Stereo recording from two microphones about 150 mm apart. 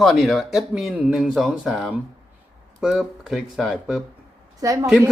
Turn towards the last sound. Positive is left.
turn(degrees=-20)  # may be behind; listen again after turning